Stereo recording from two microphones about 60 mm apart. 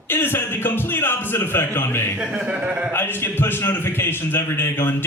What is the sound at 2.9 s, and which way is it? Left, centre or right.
A man's voice, left.